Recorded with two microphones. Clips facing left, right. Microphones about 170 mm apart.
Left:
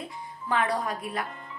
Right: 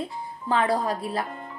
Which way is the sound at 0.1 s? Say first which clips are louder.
Right 3 dB; 30° right (ahead or behind).